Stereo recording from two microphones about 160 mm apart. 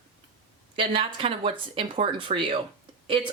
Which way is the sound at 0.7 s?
35° right (ahead or behind).